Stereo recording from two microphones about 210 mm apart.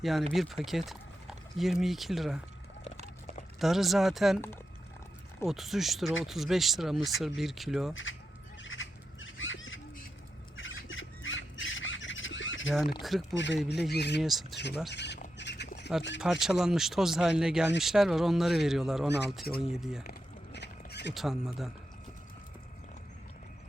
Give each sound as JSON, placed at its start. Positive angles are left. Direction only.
{"t": 0.0, "sound": "speech", "side_deg": 0}
{"t": 3.6, "sound": "speech", "side_deg": 0}
{"t": 5.5, "sound": "speech", "side_deg": 0}
{"t": 8.6, "sound": "bird", "side_deg": 65}
{"t": 10.6, "sound": "squawk", "side_deg": 65}
{"t": 13.0, "sound": "speech", "side_deg": 0}
{"t": 13.3, "sound": "speech", "side_deg": 60}
{"t": 14.2, "sound": "speech", "side_deg": 0}
{"t": 14.5, "sound": "speech", "side_deg": 55}
{"t": 15.4, "sound": "squawk", "side_deg": 55}
{"t": 16.2, "sound": "speech", "side_deg": -5}
{"t": 20.1, "sound": "a sound", "side_deg": 55}
{"t": 21.1, "sound": "speech", "side_deg": 0}